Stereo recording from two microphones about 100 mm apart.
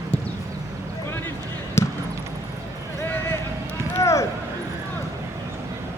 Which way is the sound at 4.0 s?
30° left (ahead or behind).